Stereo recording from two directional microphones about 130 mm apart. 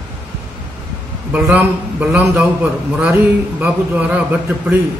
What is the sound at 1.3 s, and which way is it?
A man's voice, 10° right (ahead or behind).